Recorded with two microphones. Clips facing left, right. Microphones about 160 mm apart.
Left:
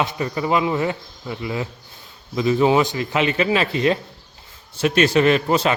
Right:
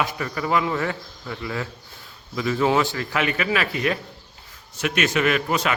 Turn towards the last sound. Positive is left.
turn(degrees=30)  # may be behind; listen again after turning